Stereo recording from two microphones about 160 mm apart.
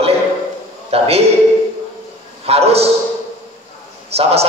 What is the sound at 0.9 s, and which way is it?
Speech, 40° right (ahead or behind).